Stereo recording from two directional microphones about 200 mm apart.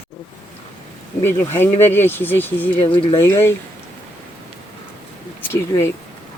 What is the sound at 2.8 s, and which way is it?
Speech, 25° left (ahead or behind).